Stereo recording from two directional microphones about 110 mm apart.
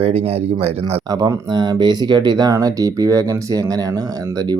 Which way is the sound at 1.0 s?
35° right (ahead or behind).